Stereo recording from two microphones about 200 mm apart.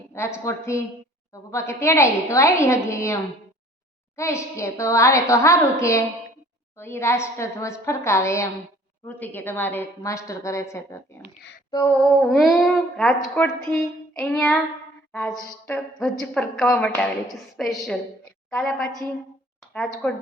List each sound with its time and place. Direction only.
0.1 s a woman's voice: 15° left (ahead or behind)
4.2 s a woman's voice: 15° left (ahead or behind)
12.2 s a woman's voice: centre (ahead or behind)
20.0 s a woman's voice: 5° left (ahead or behind)